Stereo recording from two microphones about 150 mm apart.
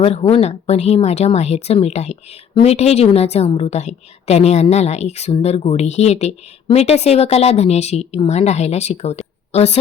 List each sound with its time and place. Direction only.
0.0 s speech: 40° left (ahead or behind)